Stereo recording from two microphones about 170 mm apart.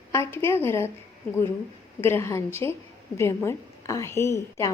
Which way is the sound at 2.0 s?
15° left (ahead or behind).